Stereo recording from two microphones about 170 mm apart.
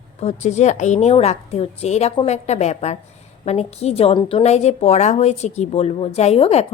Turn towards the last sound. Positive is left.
turn(degrees=35)  # may be behind; listen again after turning